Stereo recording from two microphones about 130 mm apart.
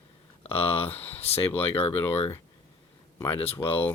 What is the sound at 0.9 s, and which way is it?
Speech, 15° left (ahead or behind).